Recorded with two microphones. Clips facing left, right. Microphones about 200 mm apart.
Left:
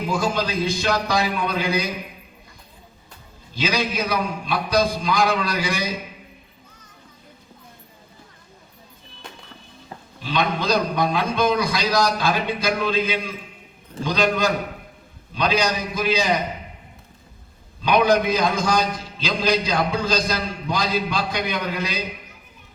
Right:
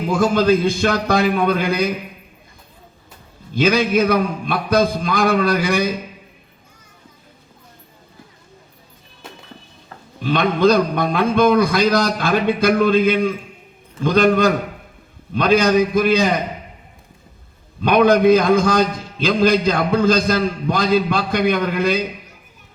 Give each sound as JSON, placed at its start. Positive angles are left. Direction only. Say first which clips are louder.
{"t": 0.1, "sound": "a man's voice", "louder": "right 10 dB", "side_deg": -55}
{"t": 3.5, "sound": "a man's voice", "louder": "right 8 dB", "side_deg": -55}
{"t": 10.2, "sound": "a man's voice", "louder": "right 7 dB", "side_deg": -55}
{"t": 17.8, "sound": "a man's voice", "louder": "right 6 dB", "side_deg": -55}